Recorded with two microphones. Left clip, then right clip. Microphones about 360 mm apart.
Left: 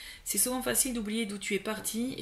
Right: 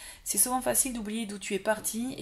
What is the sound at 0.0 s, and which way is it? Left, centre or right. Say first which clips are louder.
Speech: even; centre.